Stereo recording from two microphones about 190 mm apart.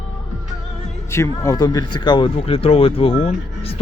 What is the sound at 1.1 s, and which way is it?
Speech, 15° left (ahead or behind).